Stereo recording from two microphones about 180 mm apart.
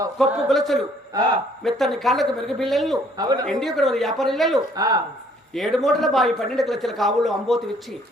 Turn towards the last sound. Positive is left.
turn(degrees=0)  # may be behind; listen again after turning